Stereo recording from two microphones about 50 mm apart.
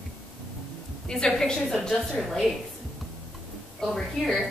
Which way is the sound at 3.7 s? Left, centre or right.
Centre.